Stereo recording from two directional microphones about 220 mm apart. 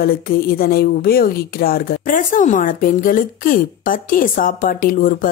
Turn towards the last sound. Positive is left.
turn(degrees=40)  # may be behind; listen again after turning